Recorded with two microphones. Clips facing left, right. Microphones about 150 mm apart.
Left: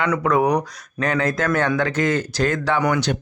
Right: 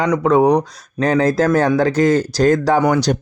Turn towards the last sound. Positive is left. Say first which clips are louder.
# right 5 dB
turn(degrees=-40)  # may be behind; listen again after turning